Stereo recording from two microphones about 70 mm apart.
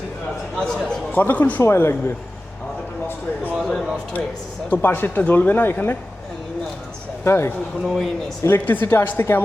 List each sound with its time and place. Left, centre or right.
0.6 s a sound: centre
1.1 s speech: left
1.6 s a woman's voice: left
3.6 s a sound: centre
4.7 s speech: left
7.3 s a woman's voice: left
7.8 s a man's voice: centre
8.4 s a woman's voice: left